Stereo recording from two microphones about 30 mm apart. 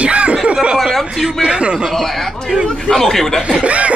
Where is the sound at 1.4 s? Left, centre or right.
Right.